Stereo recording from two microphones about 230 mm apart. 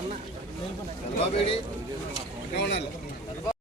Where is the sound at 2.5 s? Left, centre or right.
Left.